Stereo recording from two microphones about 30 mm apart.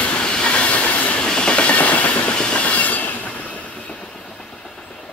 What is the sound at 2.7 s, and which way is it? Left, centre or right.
Train, left.